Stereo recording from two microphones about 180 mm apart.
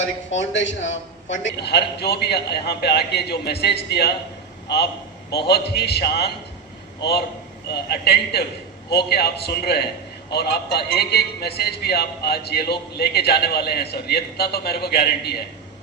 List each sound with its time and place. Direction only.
0.0 s a man's voice: 90° left; by 4.1 s 65° left (ahead or behind)
5.5 s a man's voice: 65° left (ahead or behind)